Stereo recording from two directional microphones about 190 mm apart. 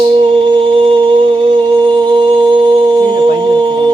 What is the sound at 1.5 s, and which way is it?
A capella, 25° right (ahead or behind).